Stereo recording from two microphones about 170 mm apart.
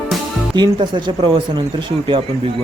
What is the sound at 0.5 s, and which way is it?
A man's voice, 25° right (ahead or behind).